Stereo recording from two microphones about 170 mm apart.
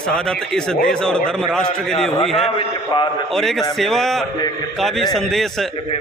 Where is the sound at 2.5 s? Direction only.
30° left (ahead or behind).